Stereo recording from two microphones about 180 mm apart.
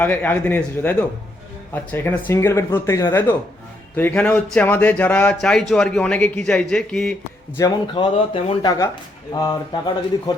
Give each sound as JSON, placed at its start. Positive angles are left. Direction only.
{"t": 0.0, "sound": "speech", "side_deg": 10}
{"t": 7.5, "sound": "speech", "side_deg": 25}